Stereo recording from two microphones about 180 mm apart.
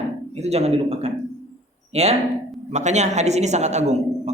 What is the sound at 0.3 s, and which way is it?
A woman's voice, 35° right (ahead or behind).